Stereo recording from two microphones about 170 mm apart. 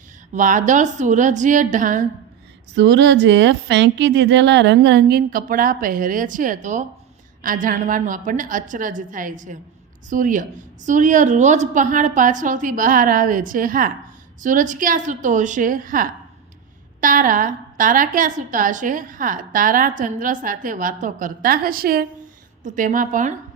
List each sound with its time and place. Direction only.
0.3 s a woman's voice: 50° right (ahead or behind)
2.7 s a woman's voice: 90° right; by 23.3 s 50° right (ahead or behind)